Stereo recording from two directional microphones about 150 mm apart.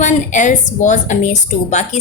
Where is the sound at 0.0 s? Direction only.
55° left (ahead or behind).